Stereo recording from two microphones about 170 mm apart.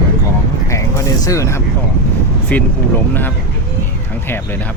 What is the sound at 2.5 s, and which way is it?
Speech, 10° left (ahead or behind).